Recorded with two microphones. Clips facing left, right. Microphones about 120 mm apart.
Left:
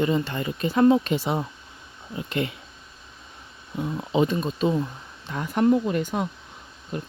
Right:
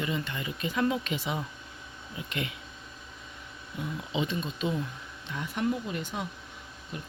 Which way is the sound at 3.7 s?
45° left (ahead or behind).